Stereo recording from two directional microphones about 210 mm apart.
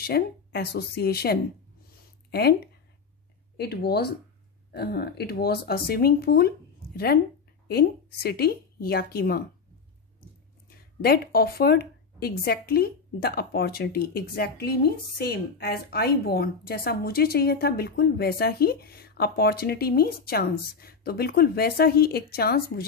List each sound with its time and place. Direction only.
0.0 s a woman's voice: 50° left (ahead or behind)
7.6 s a woman's voice: 50° left (ahead or behind)
11.0 s a woman's voice: 45° left (ahead or behind)